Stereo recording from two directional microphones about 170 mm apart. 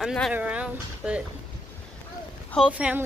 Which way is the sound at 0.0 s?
Centre (ahead or behind).